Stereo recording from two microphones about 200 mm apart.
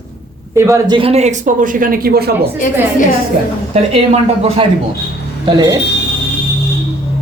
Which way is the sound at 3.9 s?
30° right (ahead or behind).